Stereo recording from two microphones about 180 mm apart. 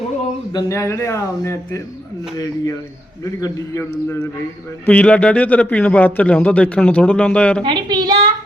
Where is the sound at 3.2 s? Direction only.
20° left (ahead or behind).